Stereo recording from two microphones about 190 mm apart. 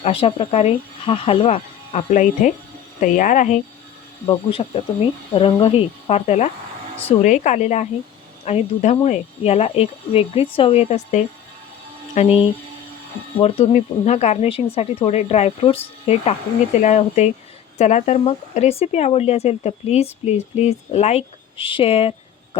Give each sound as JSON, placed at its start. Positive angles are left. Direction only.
{"t": 0.0, "sound": "speech", "side_deg": 30}
{"t": 4.3, "sound": "speech", "side_deg": 30}
{"t": 13.4, "sound": "speech", "side_deg": 35}